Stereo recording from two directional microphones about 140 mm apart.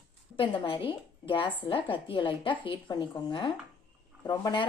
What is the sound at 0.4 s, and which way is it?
Speech, 35° left (ahead or behind).